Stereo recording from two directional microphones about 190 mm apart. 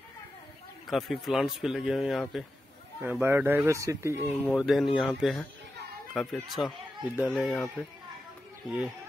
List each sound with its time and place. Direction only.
0.8 s speech: centre (ahead or behind)
3.0 s speech: 10° right (ahead or behind)
4.5 s speech: centre (ahead or behind)
8.6 s speech: 5° right (ahead or behind)